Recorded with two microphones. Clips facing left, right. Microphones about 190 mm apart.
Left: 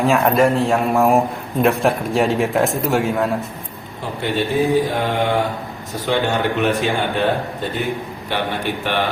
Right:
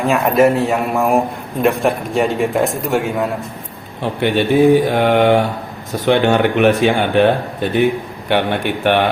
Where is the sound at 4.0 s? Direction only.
70° right (ahead or behind).